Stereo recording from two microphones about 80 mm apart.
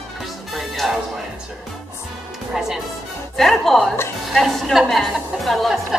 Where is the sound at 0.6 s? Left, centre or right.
Centre.